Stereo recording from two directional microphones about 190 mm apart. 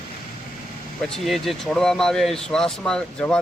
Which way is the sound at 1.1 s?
Centre (ahead or behind).